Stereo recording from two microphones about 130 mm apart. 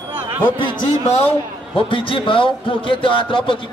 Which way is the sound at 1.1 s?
45° left (ahead or behind).